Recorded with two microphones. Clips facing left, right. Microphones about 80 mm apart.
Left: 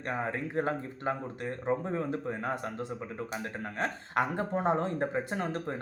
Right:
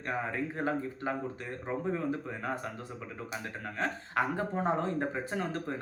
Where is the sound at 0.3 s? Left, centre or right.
Left.